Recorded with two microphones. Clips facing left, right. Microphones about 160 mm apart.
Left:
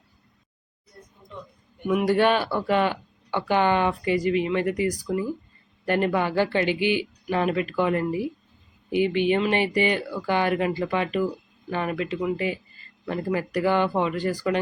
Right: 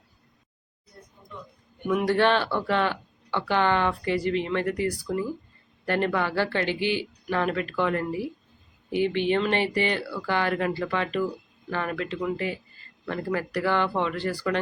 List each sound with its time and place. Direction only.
1.9 s speech: 10° left (ahead or behind)